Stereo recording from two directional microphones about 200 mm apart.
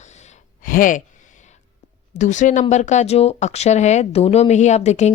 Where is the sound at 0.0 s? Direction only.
35° left (ahead or behind).